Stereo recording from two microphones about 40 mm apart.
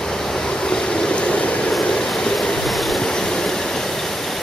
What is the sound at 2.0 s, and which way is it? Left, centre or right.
Train, centre.